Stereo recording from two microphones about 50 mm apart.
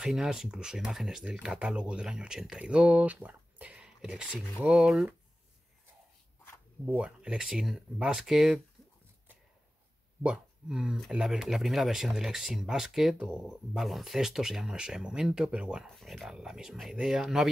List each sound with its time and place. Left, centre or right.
0.0 s speech: centre
1.2 s speech: centre
3.3 s a sound: right
3.8 s speech: centre
4.6 s speech: right
4.8 s speech: centre
7.0 s speech: right
7.4 s speech: centre
10.3 s speech: centre
16.0 s speech: centre
16.3 s speech: centre